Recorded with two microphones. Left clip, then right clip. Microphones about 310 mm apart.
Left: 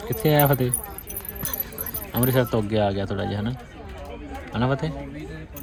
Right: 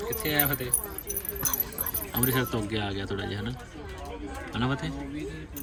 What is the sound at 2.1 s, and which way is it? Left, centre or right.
Speech, centre.